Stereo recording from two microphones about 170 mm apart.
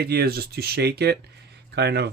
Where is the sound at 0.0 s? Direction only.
65° right (ahead or behind).